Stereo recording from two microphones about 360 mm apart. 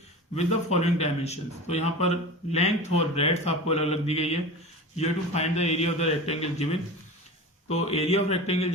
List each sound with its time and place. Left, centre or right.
0.3 s a man's voice: centre